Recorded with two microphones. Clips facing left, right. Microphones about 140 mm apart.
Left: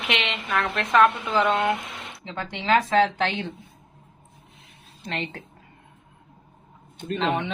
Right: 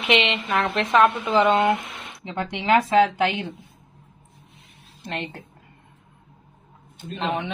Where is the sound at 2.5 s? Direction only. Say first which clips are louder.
Right 2 dB; 15° right (ahead or behind).